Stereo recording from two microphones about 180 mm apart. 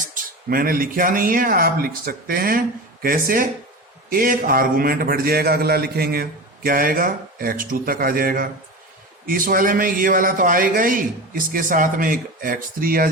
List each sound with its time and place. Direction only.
0.1 s a man's voice: 50° right (ahead or behind)